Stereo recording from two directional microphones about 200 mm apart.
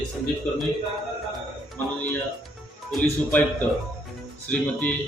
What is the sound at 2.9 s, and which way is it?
Speech, 5° left (ahead or behind).